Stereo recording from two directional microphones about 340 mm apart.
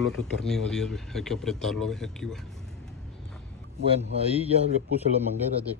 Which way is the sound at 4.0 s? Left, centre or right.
Centre.